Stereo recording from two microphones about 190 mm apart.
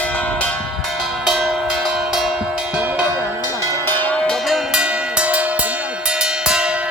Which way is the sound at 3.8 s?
10° left (ahead or behind).